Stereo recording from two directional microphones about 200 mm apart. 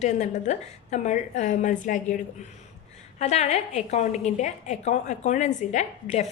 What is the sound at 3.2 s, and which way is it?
A woman's voice, 35° left (ahead or behind).